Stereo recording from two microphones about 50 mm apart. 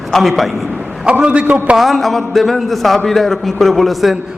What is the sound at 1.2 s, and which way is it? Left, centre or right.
Speech, right.